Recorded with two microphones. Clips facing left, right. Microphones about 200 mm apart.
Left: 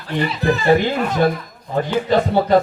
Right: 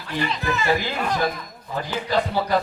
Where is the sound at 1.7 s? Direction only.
50° left (ahead or behind).